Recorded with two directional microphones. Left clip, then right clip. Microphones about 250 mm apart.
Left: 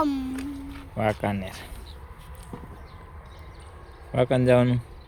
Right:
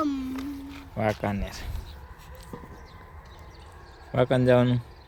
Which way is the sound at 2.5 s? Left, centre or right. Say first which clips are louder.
Even; centre.